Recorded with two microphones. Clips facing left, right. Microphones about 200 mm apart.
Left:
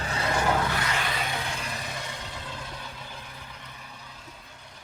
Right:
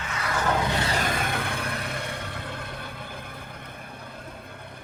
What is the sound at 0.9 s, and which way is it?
Vehicle, 45° right (ahead or behind).